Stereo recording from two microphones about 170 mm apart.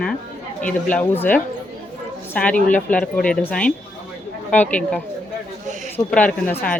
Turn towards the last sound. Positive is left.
turn(degrees=5)  # may be behind; listen again after turning